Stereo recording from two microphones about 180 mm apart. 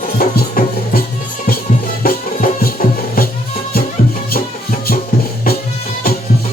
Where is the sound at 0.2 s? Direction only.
55° left (ahead or behind).